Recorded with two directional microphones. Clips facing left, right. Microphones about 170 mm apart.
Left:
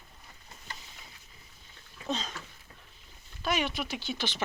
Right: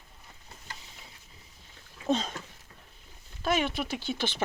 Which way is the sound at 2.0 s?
50° right (ahead or behind).